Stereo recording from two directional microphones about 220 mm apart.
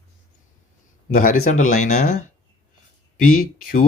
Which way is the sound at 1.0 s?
40° left (ahead or behind).